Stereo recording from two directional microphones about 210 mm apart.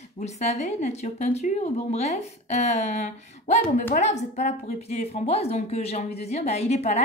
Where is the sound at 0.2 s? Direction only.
30° left (ahead or behind).